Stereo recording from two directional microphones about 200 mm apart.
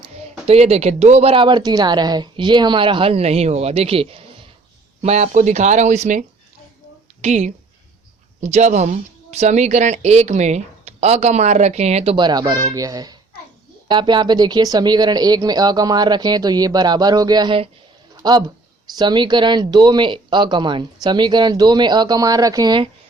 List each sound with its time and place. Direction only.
0.4 s speech: 30° right (ahead or behind)